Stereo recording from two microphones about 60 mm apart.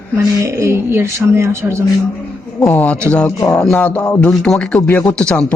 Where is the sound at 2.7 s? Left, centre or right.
Left.